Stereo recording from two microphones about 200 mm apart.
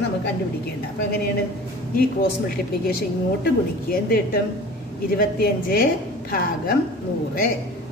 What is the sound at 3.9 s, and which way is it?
A woman's voice, 50° left (ahead or behind).